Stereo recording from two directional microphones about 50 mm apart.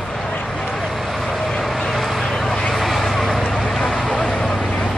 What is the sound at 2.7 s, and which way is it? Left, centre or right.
Vehicle, centre.